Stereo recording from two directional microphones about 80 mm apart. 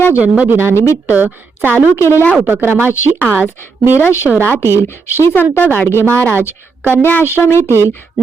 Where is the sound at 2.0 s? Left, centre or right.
Left.